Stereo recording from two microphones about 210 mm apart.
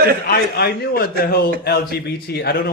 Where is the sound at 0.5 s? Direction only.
50° left (ahead or behind).